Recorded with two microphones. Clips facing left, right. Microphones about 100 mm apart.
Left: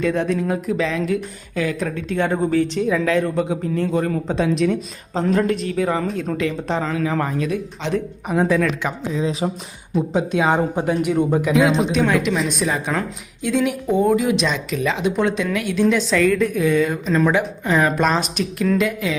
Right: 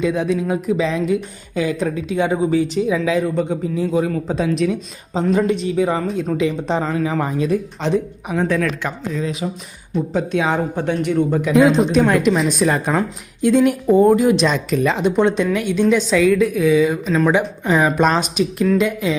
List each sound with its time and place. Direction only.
0.0 s speech: 5° right (ahead or behind)